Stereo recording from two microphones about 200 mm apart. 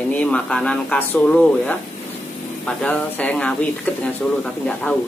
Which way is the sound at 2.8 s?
5° left (ahead or behind).